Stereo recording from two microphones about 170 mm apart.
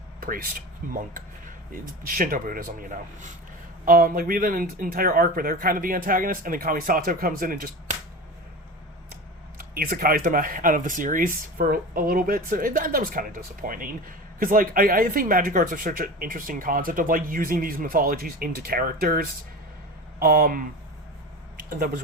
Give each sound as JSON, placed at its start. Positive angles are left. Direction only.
{"t": 0.2, "sound": "speech", "side_deg": -60}
{"t": 1.7, "sound": "speech", "side_deg": -55}
{"t": 9.6, "sound": "speech", "side_deg": -60}